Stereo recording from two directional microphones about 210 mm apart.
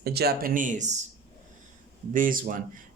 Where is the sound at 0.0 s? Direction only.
50° right (ahead or behind).